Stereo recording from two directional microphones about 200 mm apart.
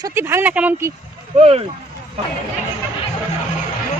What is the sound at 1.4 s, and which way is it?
Speech, 30° right (ahead or behind).